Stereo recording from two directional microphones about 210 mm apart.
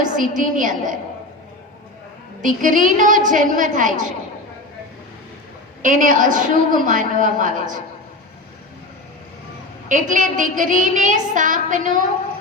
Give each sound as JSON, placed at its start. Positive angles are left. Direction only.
{"t": 0.0, "sound": "child singing", "side_deg": -40}
{"t": 2.4, "sound": "child singing", "side_deg": -40}
{"t": 5.8, "sound": "child singing", "side_deg": -40}
{"t": 9.9, "sound": "child singing", "side_deg": -35}